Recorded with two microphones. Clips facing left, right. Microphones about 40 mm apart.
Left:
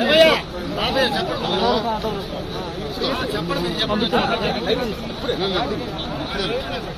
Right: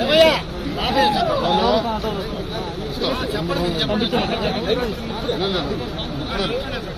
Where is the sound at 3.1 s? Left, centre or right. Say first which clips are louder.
Right 1 dB; left.